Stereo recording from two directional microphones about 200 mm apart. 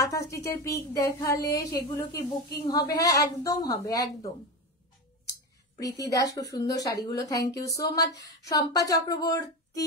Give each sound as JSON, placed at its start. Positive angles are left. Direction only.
{"t": 0.1, "sound": "speech", "side_deg": 15}
{"t": 5.8, "sound": "speech", "side_deg": 20}